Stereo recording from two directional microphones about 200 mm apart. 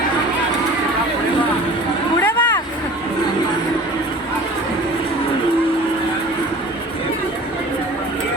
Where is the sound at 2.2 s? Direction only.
10° left (ahead or behind).